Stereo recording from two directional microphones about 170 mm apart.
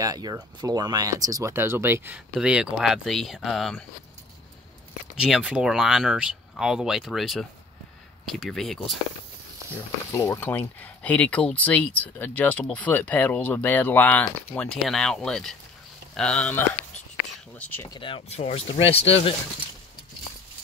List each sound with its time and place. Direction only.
0.0 s speech: 20° right (ahead or behind); by 3.8 s centre (ahead or behind)
5.1 s speech: 5° right (ahead or behind)
10.1 s speech: 15° left (ahead or behind)
17.9 s speech: 30° left (ahead or behind)